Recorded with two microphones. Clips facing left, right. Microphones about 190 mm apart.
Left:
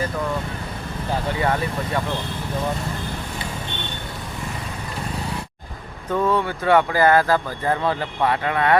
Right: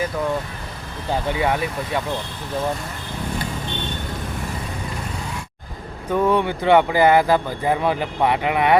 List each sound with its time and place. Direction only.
1.3 s speech: 15° right (ahead or behind)
6.1 s speech: 15° right (ahead or behind)